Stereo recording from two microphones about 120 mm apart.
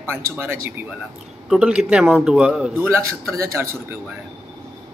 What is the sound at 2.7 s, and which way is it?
Speech, 20° right (ahead or behind).